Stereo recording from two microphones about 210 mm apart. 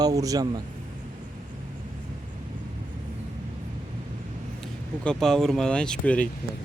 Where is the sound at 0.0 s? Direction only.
15° right (ahead or behind).